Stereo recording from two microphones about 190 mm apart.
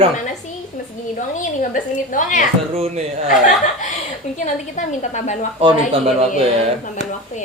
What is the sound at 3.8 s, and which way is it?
A woman's voice, 40° left (ahead or behind).